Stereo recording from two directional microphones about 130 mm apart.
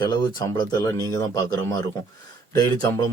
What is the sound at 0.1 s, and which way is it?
Speech, 30° left (ahead or behind).